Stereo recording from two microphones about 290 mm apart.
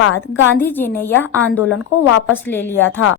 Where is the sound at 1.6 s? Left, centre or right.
Left.